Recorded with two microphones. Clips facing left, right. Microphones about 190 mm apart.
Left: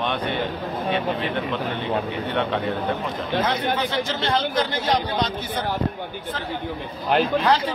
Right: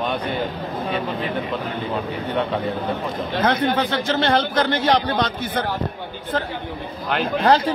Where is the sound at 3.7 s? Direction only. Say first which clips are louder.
Right 4 dB; 60° right (ahead or behind).